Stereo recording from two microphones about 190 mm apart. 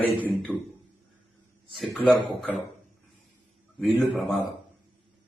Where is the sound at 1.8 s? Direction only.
5° left (ahead or behind).